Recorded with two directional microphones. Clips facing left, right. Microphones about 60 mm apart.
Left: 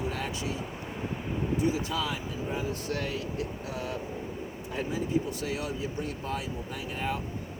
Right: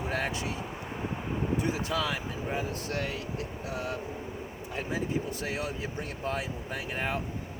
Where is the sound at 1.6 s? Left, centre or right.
Right.